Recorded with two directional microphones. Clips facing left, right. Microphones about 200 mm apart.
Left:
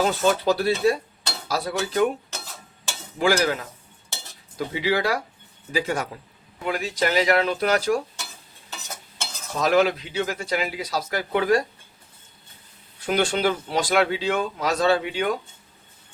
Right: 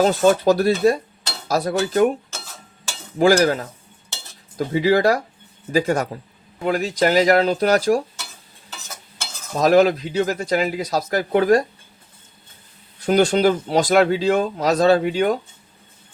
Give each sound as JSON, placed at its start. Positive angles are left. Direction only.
{"t": 0.0, "sound": "speech", "side_deg": -40}
{"t": 3.2, "sound": "speech", "side_deg": -40}
{"t": 9.6, "sound": "speech", "side_deg": -40}
{"t": 13.1, "sound": "speech", "side_deg": -40}